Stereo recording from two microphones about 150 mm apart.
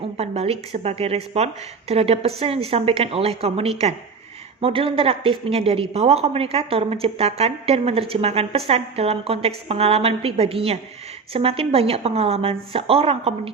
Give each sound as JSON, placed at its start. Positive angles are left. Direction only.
{"t": 0.0, "sound": "a woman's voice", "side_deg": -40}